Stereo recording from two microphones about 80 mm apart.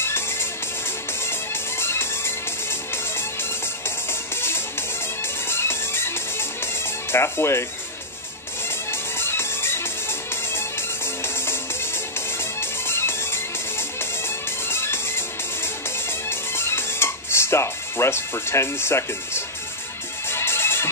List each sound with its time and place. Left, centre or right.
0.0 s music: left
4.1 s music: left
9.2 s music: left